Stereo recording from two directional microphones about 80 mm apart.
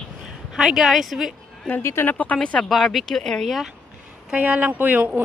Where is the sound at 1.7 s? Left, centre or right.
Left.